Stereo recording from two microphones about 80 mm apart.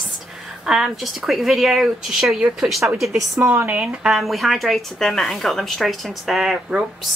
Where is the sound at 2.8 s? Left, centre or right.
Centre.